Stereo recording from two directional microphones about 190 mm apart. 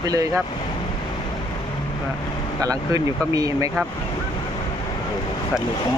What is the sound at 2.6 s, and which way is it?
Speech, 20° right (ahead or behind).